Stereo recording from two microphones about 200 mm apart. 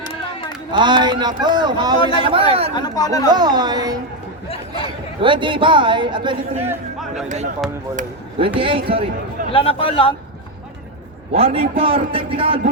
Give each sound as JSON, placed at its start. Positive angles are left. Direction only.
{"t": 0.0, "sound": "a sound", "side_deg": 25}
{"t": 0.7, "sound": "a man's voice", "side_deg": -20}
{"t": 2.7, "sound": "a man's voice", "side_deg": 20}
{"t": 3.3, "sound": "a man's voice", "side_deg": -20}
{"t": 4.4, "sound": "a sound", "side_deg": 30}
{"t": 5.2, "sound": "a man's voice", "side_deg": -25}
{"t": 7.3, "sound": "speech", "side_deg": -35}
{"t": 8.5, "sound": "a man's voice", "side_deg": -25}
{"t": 9.5, "sound": "a man's voice", "side_deg": 25}
{"t": 11.3, "sound": "a man's voice", "side_deg": -30}